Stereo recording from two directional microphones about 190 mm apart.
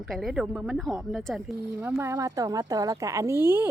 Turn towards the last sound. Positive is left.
turn(degrees=-10)  # may be behind; listen again after turning